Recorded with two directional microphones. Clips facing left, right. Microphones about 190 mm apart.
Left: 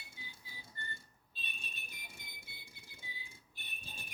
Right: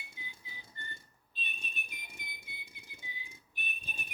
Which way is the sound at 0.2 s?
20° right (ahead or behind).